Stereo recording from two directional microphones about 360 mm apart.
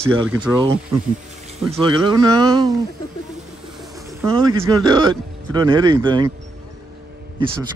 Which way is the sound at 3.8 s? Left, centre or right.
Centre.